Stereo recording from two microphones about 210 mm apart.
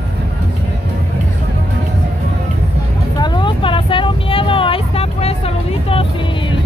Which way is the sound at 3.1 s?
20° left (ahead or behind).